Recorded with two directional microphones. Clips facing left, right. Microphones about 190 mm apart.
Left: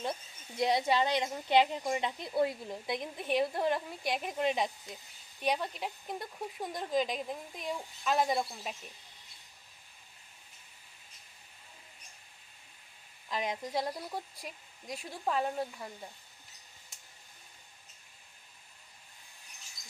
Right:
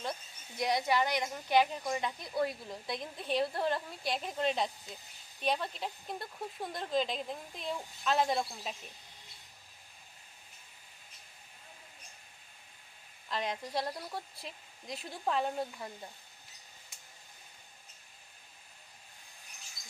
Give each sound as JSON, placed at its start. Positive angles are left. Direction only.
{"t": 0.0, "sound": "speech", "side_deg": 25}
{"t": 13.3, "sound": "speech", "side_deg": 15}